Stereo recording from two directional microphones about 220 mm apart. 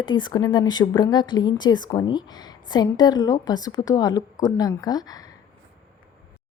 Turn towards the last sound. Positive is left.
turn(degrees=15)  # may be behind; listen again after turning